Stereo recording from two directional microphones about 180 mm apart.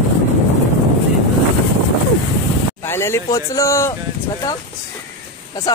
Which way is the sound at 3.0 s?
15° left (ahead or behind).